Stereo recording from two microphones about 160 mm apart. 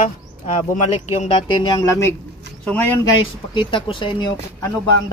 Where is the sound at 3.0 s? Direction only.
30° left (ahead or behind).